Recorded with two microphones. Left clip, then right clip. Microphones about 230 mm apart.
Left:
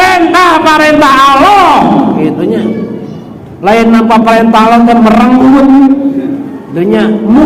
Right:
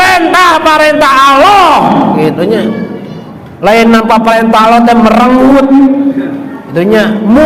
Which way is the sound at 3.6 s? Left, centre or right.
Right.